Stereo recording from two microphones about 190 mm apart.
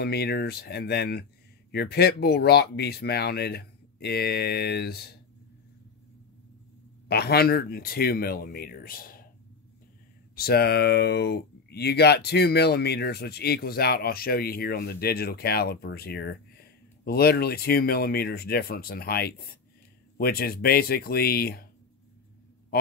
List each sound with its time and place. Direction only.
0.0 s speech: 55° left (ahead or behind)
7.1 s speech: 55° left (ahead or behind)
10.3 s speech: 55° left (ahead or behind)